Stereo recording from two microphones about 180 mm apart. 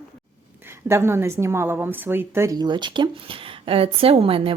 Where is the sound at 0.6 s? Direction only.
15° right (ahead or behind).